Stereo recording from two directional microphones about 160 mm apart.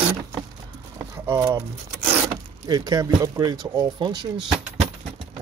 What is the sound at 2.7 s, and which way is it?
Speech, 25° right (ahead or behind).